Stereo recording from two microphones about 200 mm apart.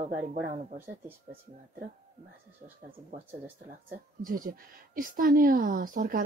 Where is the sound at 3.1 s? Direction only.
40° right (ahead or behind).